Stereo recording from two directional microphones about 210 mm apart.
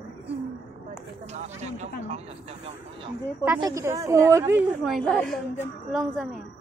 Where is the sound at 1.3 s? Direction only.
30° right (ahead or behind).